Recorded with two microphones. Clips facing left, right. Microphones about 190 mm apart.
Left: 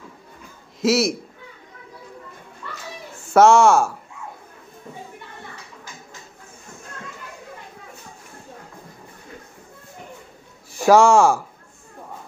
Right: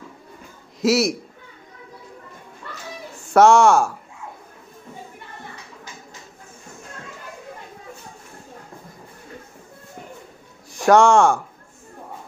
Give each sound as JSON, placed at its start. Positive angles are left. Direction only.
{"t": 0.7, "sound": "a man's voice", "side_deg": 0}
{"t": 3.3, "sound": "speech", "side_deg": 0}
{"t": 10.7, "sound": "speech", "side_deg": 5}